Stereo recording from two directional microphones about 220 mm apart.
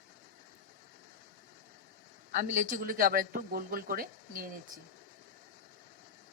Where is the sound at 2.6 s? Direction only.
40° right (ahead or behind).